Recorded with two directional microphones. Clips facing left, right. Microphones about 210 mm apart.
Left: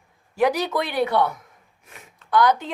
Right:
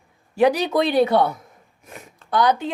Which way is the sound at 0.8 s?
30° right (ahead or behind).